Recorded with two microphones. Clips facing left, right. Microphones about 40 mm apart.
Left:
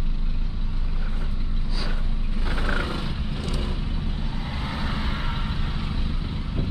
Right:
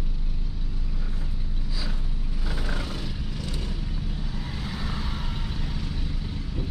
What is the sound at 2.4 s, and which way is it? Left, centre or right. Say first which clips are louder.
Vehicle: left 6 dB; left.